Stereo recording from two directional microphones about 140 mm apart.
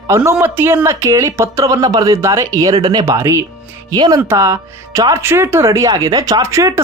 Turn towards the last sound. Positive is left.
turn(degrees=-20)  # may be behind; listen again after turning